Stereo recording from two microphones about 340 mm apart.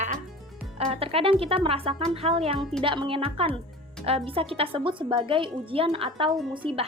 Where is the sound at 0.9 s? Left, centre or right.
Centre.